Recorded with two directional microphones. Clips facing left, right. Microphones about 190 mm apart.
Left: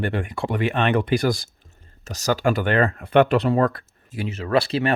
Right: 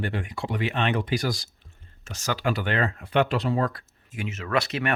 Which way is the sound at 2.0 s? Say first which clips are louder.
Left 6 dB; 40° left (ahead or behind).